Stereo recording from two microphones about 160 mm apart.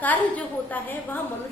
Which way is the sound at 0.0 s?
10° left (ahead or behind).